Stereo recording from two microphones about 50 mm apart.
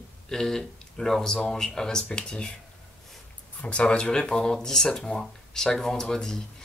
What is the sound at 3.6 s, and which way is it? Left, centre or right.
Speech, left.